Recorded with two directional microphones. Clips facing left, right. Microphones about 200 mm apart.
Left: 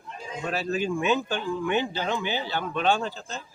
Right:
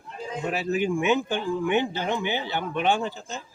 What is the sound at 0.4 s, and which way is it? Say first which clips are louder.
Speech: right 2 dB; 20° right (ahead or behind).